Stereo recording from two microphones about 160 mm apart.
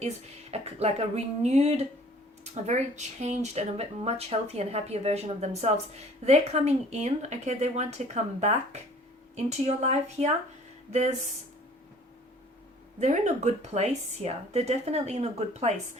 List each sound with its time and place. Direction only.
0.5 s speech: 40° right (ahead or behind)
13.0 s speech: 45° right (ahead or behind)